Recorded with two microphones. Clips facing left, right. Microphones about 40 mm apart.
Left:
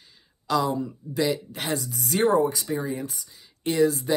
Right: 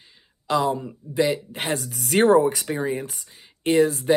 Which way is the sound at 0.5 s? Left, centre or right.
Right.